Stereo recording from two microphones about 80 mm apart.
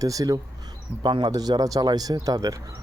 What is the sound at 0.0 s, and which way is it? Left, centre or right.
Speech, right.